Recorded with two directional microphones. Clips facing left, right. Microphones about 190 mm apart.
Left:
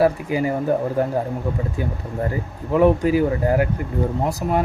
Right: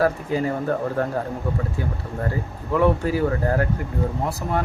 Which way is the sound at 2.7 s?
15° left (ahead or behind).